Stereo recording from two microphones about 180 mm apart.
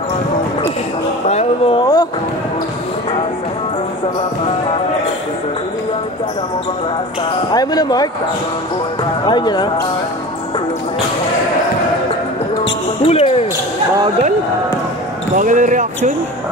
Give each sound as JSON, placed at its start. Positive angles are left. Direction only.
{"t": 1.3, "sound": "a sound", "side_deg": 35}
{"t": 7.5, "sound": "speech", "side_deg": 20}
{"t": 9.2, "sound": "speech", "side_deg": 25}
{"t": 13.0, "sound": "basketball bounce", "side_deg": 35}
{"t": 15.3, "sound": "speech", "side_deg": -45}